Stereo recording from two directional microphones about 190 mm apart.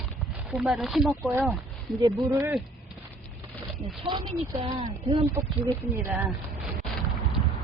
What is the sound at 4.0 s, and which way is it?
Speech, 20° right (ahead or behind).